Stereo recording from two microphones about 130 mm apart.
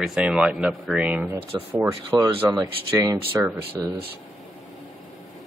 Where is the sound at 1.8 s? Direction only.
20° right (ahead or behind).